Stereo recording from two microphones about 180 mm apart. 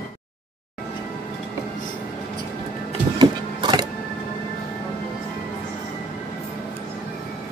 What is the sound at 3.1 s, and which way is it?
Vehicle, 25° right (ahead or behind).